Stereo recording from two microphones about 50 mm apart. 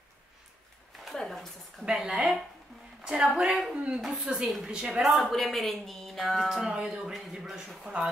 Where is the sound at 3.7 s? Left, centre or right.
Right.